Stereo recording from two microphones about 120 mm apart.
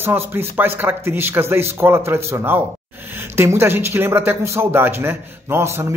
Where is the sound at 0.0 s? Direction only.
20° right (ahead or behind).